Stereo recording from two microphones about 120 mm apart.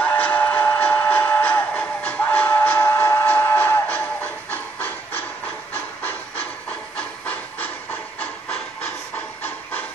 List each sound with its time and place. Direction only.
0.0 s steam whistle: 15° left (ahead or behind)
7.0 s hiss: 10° left (ahead or behind)
9.4 s hiss: 15° left (ahead or behind)